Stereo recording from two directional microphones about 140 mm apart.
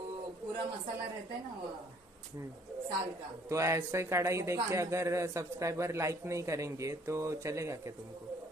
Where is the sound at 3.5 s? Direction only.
20° right (ahead or behind).